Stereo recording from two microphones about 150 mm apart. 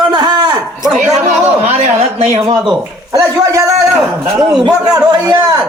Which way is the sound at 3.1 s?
20° right (ahead or behind).